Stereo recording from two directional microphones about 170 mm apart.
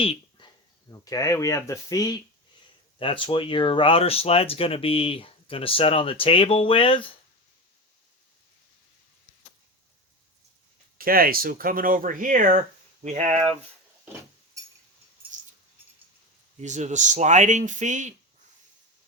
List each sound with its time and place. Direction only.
0.0 s a sound: 35° left (ahead or behind)
0.9 s speech: 20° left (ahead or behind)
3.0 s speech: 30° left (ahead or behind)
10.9 s speech: 60° right (ahead or behind)
14.0 s a sound: 10° right (ahead or behind)
16.6 s speech: 45° right (ahead or behind)